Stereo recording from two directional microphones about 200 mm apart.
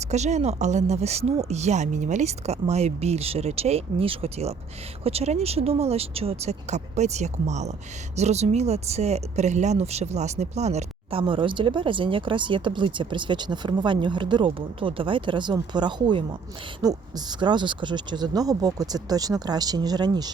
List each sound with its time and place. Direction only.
0.0 s a woman's voice: 35° right (ahead or behind)